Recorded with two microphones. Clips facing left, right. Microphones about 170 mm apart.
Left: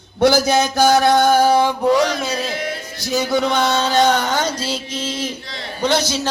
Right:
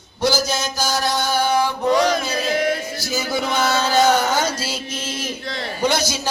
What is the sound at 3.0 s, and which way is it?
A man's voice, 5° right (ahead or behind).